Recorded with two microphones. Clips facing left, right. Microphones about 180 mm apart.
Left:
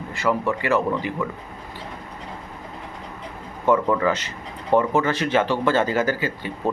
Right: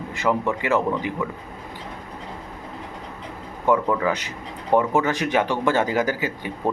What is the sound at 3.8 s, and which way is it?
Speech, 10° right (ahead or behind).